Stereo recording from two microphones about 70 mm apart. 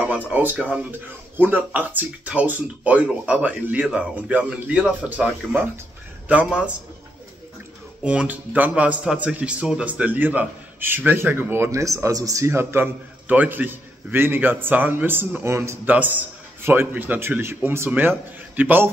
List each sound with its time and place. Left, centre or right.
0.3 s a man's voice: right
8.0 s a man's voice: centre; by 11.8 s right
11.8 s speech: right
12.5 s speech: right
13.3 s a man's voice: right
15.8 s a man's voice: right